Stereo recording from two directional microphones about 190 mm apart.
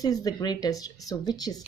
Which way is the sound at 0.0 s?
20° left (ahead or behind).